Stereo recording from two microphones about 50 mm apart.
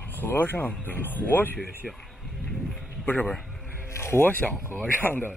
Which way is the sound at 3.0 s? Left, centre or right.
Left.